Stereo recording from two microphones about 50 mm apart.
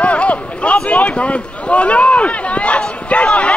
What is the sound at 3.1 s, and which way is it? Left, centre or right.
Chatter, left.